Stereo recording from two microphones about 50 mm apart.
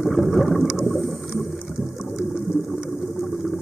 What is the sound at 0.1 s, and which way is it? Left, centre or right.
Boat, centre.